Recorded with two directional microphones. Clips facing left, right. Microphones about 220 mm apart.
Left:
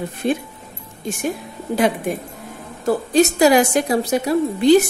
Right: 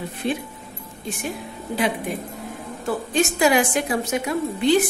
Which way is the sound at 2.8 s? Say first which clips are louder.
Left 7 dB; 40° left (ahead or behind).